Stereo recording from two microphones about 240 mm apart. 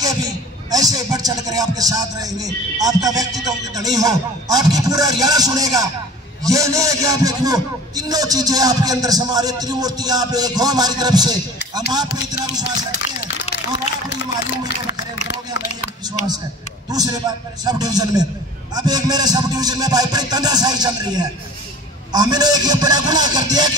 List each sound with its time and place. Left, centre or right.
0.0 s a man's voice: centre
16.9 s a man's voice: centre